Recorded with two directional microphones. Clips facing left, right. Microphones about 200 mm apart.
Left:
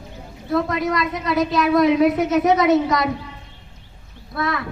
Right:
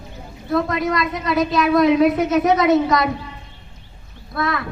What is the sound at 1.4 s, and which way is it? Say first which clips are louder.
A woman's voice: right 1 dB; 15° left (ahead or behind).